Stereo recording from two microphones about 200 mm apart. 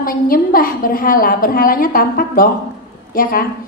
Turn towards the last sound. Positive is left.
turn(degrees=45)  # may be behind; listen again after turning